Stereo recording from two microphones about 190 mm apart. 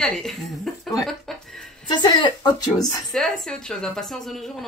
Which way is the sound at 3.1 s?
5° left (ahead or behind).